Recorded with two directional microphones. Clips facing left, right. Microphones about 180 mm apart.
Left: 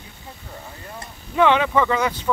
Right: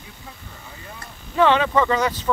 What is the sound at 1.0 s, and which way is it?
Speech, 10° left (ahead or behind).